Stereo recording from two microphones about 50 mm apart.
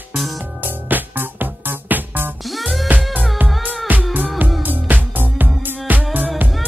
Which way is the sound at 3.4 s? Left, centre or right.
Right.